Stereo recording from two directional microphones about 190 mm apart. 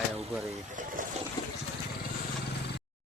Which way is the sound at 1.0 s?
45° right (ahead or behind).